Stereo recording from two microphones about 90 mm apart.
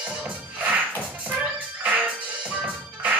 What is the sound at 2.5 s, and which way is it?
Music, 20° right (ahead or behind).